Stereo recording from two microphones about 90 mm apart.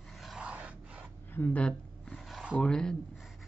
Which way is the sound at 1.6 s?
10° left (ahead or behind).